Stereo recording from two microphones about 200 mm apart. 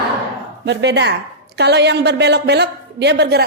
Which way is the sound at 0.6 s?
60° right (ahead or behind).